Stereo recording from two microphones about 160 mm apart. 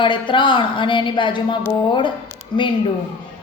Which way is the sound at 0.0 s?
30° left (ahead or behind).